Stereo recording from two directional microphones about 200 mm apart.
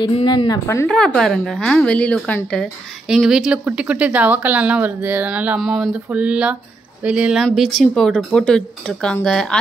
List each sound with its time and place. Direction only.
0.0 s a woman's voice: 25° left (ahead or behind)
0.8 s speech: 5° left (ahead or behind)